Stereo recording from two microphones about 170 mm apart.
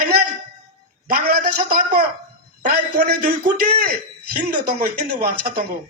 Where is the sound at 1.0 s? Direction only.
60° right (ahead or behind).